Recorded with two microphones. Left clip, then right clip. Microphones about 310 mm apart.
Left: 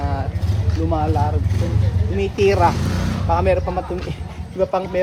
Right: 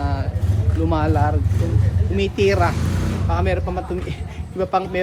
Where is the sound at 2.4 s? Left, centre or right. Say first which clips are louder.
Left 3 dB; centre.